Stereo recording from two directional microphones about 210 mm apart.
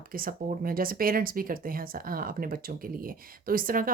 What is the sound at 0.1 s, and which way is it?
Speech, 45° right (ahead or behind).